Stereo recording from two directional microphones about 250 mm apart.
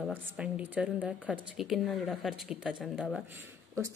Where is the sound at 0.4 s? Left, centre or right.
Centre.